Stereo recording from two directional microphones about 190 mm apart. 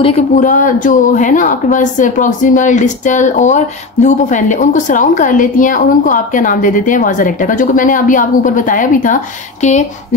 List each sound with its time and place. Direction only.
0.0 s speech: 35° left (ahead or behind)